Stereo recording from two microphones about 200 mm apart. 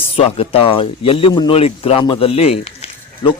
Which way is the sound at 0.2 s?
30° left (ahead or behind).